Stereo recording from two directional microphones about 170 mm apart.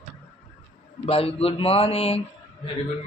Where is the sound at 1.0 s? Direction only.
35° left (ahead or behind).